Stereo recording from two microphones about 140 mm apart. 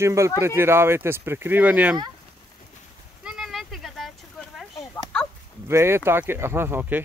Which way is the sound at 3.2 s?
5° right (ahead or behind).